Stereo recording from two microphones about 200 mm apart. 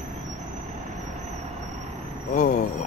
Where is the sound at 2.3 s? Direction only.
40° left (ahead or behind).